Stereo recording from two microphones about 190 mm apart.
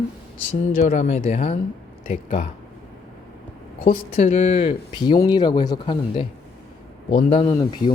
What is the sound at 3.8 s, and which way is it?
Speech, 40° left (ahead or behind).